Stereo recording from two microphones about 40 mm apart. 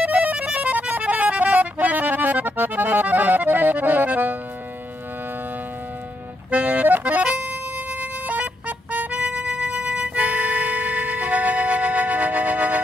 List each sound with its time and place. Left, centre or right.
0.0 s music: right
6.5 s accordion: right
7.2 s music: right